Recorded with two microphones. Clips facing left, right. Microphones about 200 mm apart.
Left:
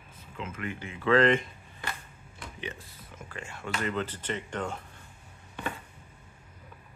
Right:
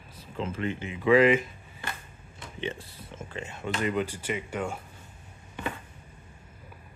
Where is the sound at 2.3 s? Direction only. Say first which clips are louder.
Right 5 dB; 25° right (ahead or behind).